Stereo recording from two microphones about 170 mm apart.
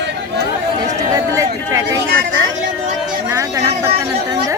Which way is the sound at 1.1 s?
20° right (ahead or behind).